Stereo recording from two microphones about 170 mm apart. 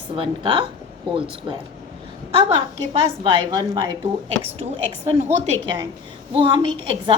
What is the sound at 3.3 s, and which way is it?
Speech, 30° right (ahead or behind).